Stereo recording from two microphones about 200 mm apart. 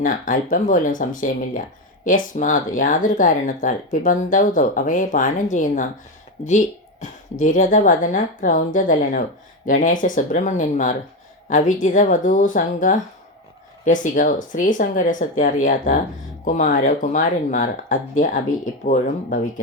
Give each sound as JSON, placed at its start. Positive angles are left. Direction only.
{"t": 0.0, "sound": "speech", "side_deg": 40}
{"t": 7.0, "sound": "speech", "side_deg": 40}